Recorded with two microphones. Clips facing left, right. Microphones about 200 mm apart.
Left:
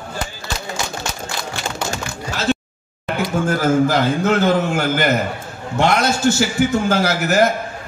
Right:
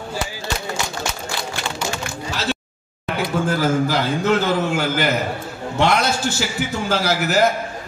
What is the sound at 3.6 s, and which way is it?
A man's voice, 50° left (ahead or behind).